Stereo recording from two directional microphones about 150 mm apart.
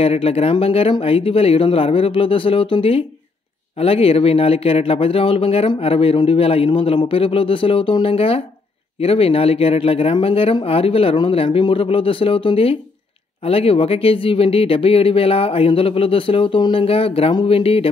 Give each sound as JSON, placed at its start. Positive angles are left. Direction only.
{"t": 0.0, "sound": "speech", "side_deg": 40}